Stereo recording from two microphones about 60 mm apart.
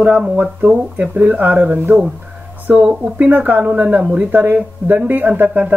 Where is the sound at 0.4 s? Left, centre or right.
Right.